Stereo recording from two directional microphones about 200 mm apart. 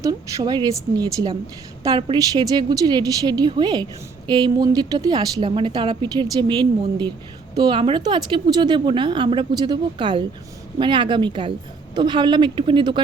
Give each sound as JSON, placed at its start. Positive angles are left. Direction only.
{"t": 0.0, "sound": "a woman's voice", "side_deg": -15}